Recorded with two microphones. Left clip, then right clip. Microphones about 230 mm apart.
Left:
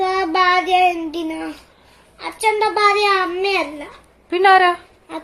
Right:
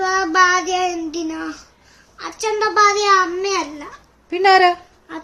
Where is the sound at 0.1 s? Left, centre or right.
Centre.